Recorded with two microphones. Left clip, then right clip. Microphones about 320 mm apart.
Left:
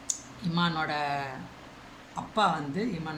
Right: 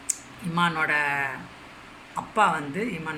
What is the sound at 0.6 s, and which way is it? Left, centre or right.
Speech, centre.